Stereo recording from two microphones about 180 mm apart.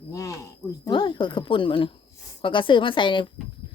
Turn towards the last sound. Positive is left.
turn(degrees=25)  # may be behind; listen again after turning